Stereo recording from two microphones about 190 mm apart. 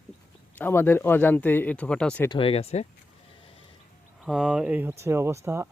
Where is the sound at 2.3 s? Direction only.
30° left (ahead or behind).